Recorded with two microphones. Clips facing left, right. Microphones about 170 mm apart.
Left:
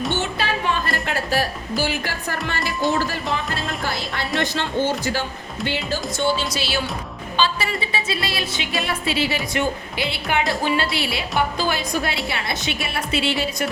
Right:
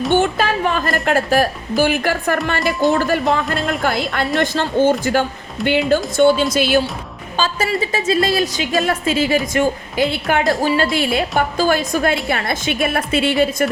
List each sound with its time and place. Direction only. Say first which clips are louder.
0.1 s music: right 8 dB; 50° right (ahead or behind)
1.0 s a woman's voice: right 9 dB; 50° right (ahead or behind)
2.6 s speech: right 4 dB; centre (ahead or behind)
3.1 s a woman's voice: right 8 dB; 55° right (ahead or behind)